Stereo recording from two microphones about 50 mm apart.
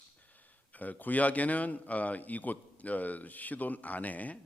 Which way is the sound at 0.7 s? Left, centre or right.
Left.